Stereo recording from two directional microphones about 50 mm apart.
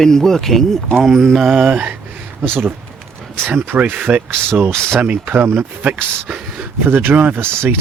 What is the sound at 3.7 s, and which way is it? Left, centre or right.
Speech, right.